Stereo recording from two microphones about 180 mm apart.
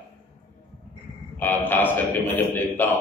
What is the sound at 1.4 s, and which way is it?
A man's voice, 10° left (ahead or behind).